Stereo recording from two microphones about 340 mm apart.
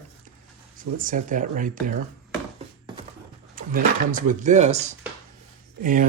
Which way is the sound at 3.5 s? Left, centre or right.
Right.